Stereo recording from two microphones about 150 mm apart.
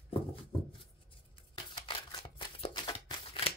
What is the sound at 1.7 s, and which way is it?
Shuffling cards, 30° left (ahead or behind).